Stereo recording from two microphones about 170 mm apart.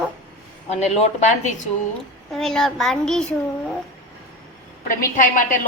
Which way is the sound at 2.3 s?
Centre (ahead or behind).